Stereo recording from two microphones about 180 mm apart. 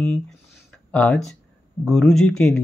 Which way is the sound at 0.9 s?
5° left (ahead or behind).